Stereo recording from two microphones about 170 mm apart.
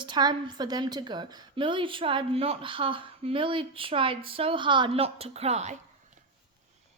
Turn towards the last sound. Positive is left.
turn(degrees=-40)  # may be behind; listen again after turning